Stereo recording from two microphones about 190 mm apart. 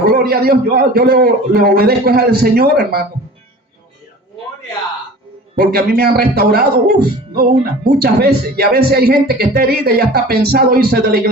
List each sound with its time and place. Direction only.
0.1 s speech: 55° right (ahead or behind)
5.5 s speech: 55° right (ahead or behind)